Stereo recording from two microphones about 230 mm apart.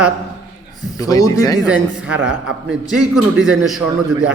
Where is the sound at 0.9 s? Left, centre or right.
Centre.